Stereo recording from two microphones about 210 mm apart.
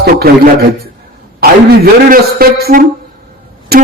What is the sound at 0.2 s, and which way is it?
Music, 45° right (ahead or behind).